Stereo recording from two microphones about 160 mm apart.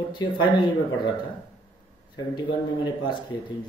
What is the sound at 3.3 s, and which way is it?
Speech, 25° left (ahead or behind).